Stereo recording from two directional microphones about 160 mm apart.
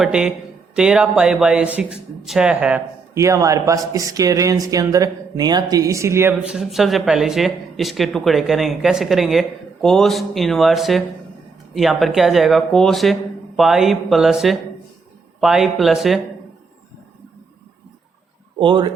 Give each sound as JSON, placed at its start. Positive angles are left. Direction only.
{"t": 0.0, "sound": "speech", "side_deg": -5}
{"t": 3.2, "sound": "speech", "side_deg": -20}
{"t": 18.6, "sound": "speech", "side_deg": -30}